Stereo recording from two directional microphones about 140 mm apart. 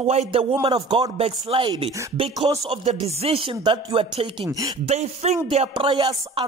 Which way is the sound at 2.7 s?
45° right (ahead or behind).